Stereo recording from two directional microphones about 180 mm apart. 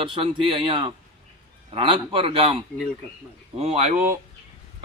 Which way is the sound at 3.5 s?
40° right (ahead or behind).